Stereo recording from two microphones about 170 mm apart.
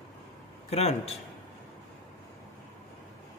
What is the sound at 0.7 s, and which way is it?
Speech, 35° left (ahead or behind).